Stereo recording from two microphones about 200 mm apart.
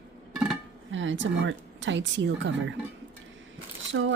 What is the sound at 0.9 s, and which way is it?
A woman's voice, 70° right (ahead or behind).